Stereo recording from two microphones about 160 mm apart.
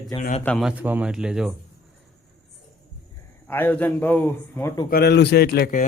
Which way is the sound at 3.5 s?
10° left (ahead or behind).